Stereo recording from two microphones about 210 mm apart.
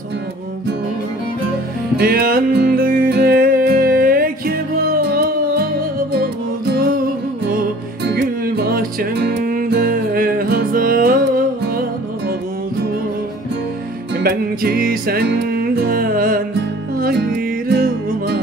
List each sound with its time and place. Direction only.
2.0 s music: 45° right (ahead or behind)
6.7 s music: 45° right (ahead or behind)
14.2 s music: 45° right (ahead or behind)
17.6 s music: 50° right (ahead or behind)